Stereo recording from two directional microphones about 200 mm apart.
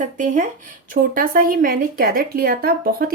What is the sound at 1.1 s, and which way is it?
Speech, 45° right (ahead or behind).